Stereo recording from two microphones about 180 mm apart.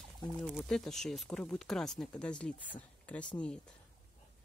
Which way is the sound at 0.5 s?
Centre (ahead or behind).